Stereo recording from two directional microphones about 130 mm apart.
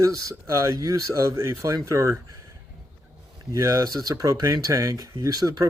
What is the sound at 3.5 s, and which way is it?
Speech, 25° right (ahead or behind).